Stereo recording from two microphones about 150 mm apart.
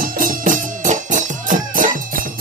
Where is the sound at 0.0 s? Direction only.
65° right (ahead or behind).